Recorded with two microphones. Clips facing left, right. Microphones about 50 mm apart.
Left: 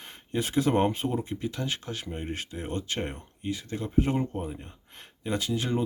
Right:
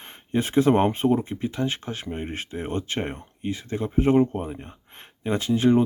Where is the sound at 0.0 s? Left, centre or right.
Right.